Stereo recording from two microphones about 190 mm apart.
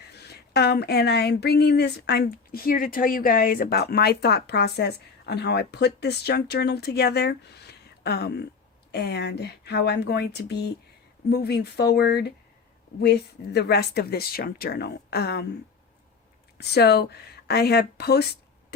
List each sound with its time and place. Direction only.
0.1 s speech: 60° left (ahead or behind)
16.6 s speech: 60° left (ahead or behind)